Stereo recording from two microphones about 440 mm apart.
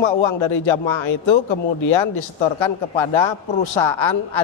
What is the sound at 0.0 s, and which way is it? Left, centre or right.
A woman's voice, left.